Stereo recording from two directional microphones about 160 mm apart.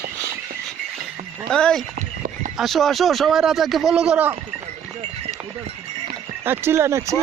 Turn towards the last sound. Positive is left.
turn(degrees=-15)  # may be behind; listen again after turning